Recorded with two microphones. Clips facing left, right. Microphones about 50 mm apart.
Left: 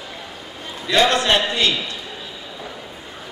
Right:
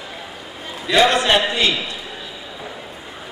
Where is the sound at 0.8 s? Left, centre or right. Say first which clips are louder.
Right 2 dB; centre.